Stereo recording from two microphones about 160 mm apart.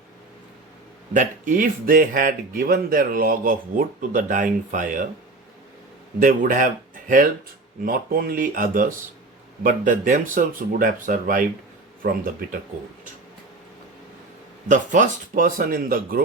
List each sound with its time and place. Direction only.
1.1 s speech: 55° right (ahead or behind)
6.1 s speech: 60° right (ahead or behind)
7.9 s speech: 65° right (ahead or behind)
14.7 s speech: 55° right (ahead or behind)